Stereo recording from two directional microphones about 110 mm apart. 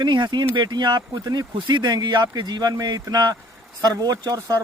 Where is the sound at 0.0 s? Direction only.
45° right (ahead or behind).